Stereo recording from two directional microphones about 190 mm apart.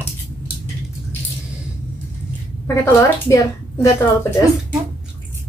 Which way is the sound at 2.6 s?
15° left (ahead or behind).